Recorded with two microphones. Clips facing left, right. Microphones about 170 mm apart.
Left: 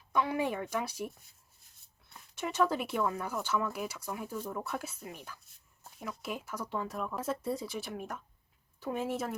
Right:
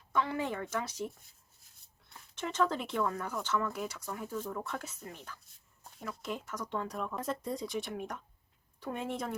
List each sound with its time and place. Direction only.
0.1 s speech: 15° left (ahead or behind)